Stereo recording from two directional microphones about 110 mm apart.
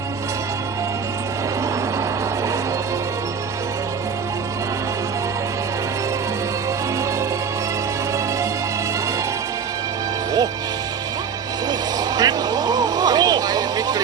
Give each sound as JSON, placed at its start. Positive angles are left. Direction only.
{"t": 11.7, "sound": "music", "side_deg": -40}